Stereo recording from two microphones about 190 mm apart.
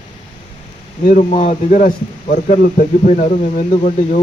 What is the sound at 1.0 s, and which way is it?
A man's voice, 40° left (ahead or behind).